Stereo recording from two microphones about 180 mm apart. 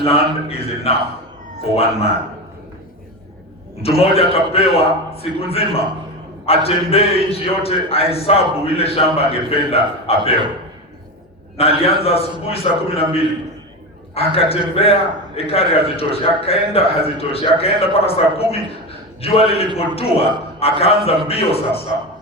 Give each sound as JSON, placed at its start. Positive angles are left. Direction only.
{"t": 0.0, "sound": "a man's voice", "side_deg": 35}
{"t": 3.8, "sound": "a man's voice", "side_deg": 35}
{"t": 11.5, "sound": "a man's voice", "side_deg": 35}